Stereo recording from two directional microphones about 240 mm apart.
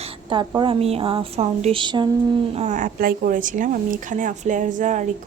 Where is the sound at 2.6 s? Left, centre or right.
Right.